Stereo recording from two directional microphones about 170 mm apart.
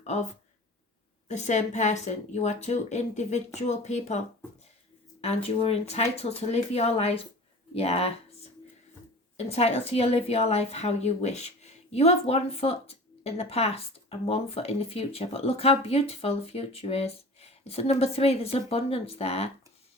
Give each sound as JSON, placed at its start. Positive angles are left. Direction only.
{"t": 0.0, "sound": "speech", "side_deg": 40}
{"t": 1.3, "sound": "a woman's voice", "side_deg": 45}
{"t": 5.2, "sound": "a woman's voice", "side_deg": 35}
{"t": 9.5, "sound": "a woman's voice", "side_deg": 40}